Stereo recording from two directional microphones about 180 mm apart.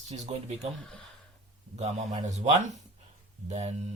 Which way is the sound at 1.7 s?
40° right (ahead or behind).